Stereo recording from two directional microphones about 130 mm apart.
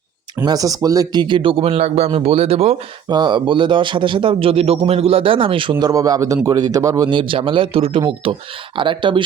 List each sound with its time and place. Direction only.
0.4 s speech: 30° right (ahead or behind); by 2.7 s 50° right (ahead or behind)
3.1 s a man's voice: 35° right (ahead or behind)
5.8 s a man's voice: 30° right (ahead or behind)
7.1 s a man's voice: 40° right (ahead or behind)